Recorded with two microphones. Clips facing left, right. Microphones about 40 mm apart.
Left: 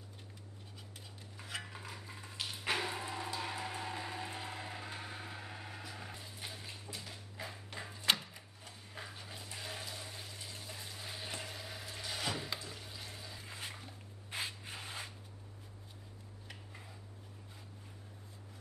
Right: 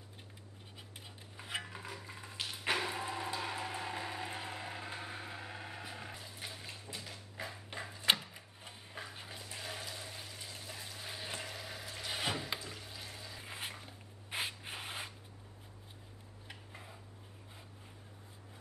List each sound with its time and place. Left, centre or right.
1.3 s music: centre
5.9 s dog: centre
7.7 s a sound: centre
9.1 s dog: centre
9.4 s water: centre
12.1 s a sound: right
12.5 s frying: centre
13.4 s a sound: right
14.3 s rub: right
16.4 s tick-tock: centre